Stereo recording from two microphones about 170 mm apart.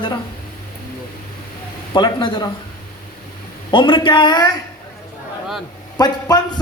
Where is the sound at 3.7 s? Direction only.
30° left (ahead or behind).